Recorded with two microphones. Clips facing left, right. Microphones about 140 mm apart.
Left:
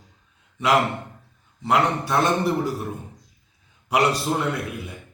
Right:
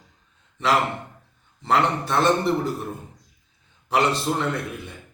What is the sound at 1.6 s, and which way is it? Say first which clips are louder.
A man's voice: even; 5° left (ahead or behind).